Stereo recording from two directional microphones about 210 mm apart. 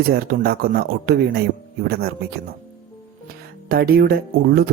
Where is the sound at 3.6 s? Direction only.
45° right (ahead or behind).